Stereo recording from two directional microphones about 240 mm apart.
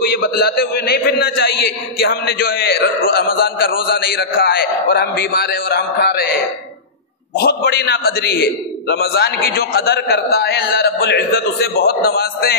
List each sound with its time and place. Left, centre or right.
0.0 s a man's voice: left
7.3 s a man's voice: left